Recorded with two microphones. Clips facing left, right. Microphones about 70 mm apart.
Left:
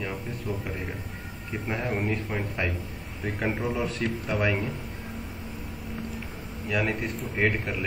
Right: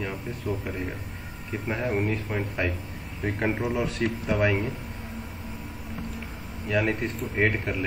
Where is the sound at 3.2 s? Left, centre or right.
Centre.